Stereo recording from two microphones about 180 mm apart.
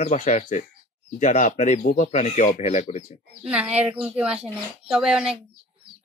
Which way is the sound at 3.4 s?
5° right (ahead or behind).